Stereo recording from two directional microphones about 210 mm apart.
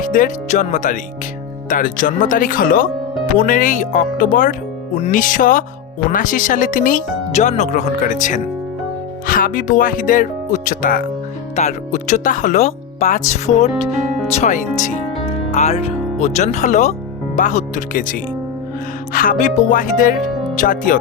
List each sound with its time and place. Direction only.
0.1 s speech: 35° left (ahead or behind)